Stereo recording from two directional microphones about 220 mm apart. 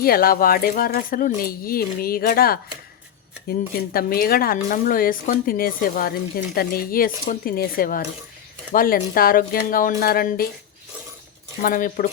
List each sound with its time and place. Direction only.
0.0 s speech: 40° left (ahead or behind)
3.9 s speech: 40° left (ahead or behind)
11.6 s speech: 40° left (ahead or behind)